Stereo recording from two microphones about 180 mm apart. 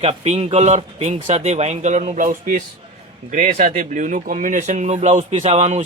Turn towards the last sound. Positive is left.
turn(degrees=-35)  # may be behind; listen again after turning